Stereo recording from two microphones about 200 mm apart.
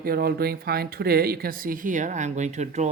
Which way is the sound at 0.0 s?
50° right (ahead or behind).